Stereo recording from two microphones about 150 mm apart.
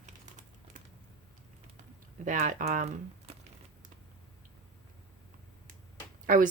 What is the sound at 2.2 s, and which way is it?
Speech, 60° right (ahead or behind).